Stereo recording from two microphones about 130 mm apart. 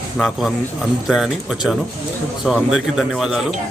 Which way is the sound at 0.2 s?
Centre (ahead or behind).